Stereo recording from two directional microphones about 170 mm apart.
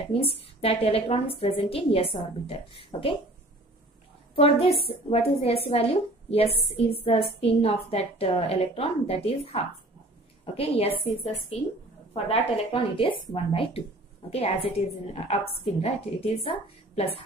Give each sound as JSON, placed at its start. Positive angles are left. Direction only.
{"t": 0.0, "sound": "a woman's voice", "side_deg": 35}
{"t": 4.4, "sound": "a woman's voice", "side_deg": 35}